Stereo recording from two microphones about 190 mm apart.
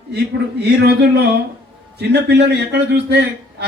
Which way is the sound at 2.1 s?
60° right (ahead or behind).